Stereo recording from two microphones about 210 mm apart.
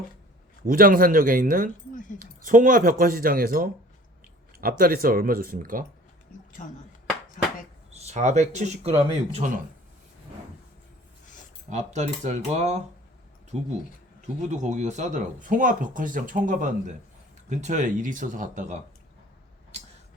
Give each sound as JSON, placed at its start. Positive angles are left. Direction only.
{"t": 0.6, "sound": "speech", "side_deg": -40}
{"t": 1.9, "sound": "speech", "side_deg": 40}
{"t": 2.1, "sound": "speech", "side_deg": -40}
{"t": 4.8, "sound": "speech", "side_deg": -45}
{"t": 7.9, "sound": "speech", "side_deg": -30}
{"t": 11.7, "sound": "speech", "side_deg": -35}